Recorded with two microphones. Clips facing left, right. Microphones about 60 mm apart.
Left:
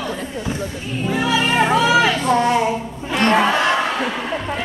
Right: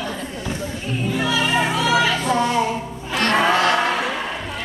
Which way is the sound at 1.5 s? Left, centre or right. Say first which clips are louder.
Left 4 dB; left.